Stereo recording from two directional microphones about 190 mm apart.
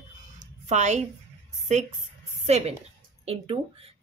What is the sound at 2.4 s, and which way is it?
A woman's voice, 35° right (ahead or behind).